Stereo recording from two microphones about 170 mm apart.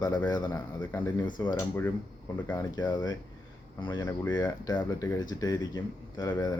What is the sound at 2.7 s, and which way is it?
Speech, 25° left (ahead or behind).